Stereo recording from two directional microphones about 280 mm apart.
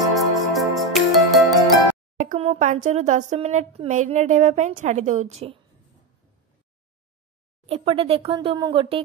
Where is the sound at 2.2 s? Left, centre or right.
Right.